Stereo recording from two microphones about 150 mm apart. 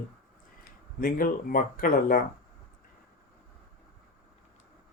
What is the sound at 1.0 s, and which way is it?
Speech, 70° left (ahead or behind).